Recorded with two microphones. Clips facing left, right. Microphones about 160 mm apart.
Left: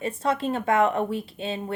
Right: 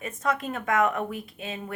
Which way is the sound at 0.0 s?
30° left (ahead or behind).